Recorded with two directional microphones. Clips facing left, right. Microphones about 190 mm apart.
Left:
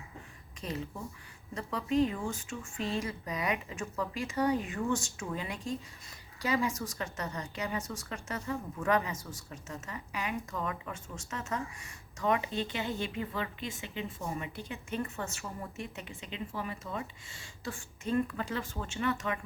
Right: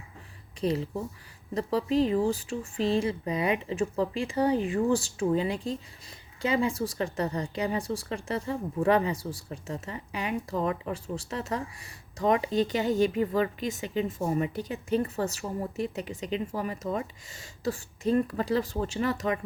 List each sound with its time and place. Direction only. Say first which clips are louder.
0.6 s speech: right 10 dB; 30° right (ahead or behind)